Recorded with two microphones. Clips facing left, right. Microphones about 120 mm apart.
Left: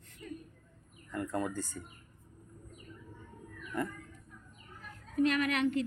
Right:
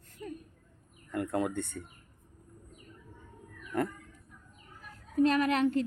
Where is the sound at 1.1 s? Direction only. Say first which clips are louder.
Right 4 dB; 70° right (ahead or behind).